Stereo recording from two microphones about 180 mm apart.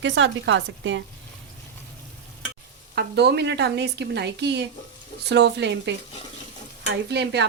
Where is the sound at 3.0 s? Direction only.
65° right (ahead or behind).